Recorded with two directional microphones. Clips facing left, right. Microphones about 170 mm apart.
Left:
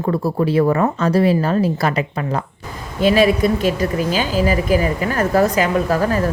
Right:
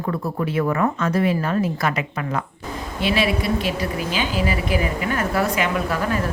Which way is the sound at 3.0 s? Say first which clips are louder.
Left 8 dB; 45° left (ahead or behind).